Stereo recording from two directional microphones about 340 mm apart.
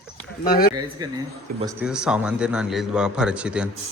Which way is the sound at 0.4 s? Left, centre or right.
Left.